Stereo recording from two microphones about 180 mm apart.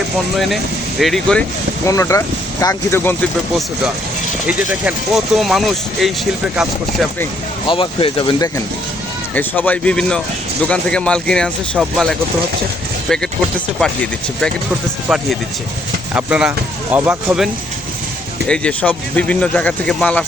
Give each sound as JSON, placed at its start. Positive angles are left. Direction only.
{"t": 0.3, "sound": "speech", "side_deg": 0}
{"t": 1.9, "sound": "speech", "side_deg": 15}
{"t": 4.4, "sound": "speech", "side_deg": -5}
{"t": 7.7, "sound": "speech", "side_deg": 30}
{"t": 9.3, "sound": "speech", "side_deg": 10}
{"t": 13.7, "sound": "speech", "side_deg": 5}
{"t": 16.1, "sound": "speech", "side_deg": -5}
{"t": 18.4, "sound": "speech", "side_deg": 5}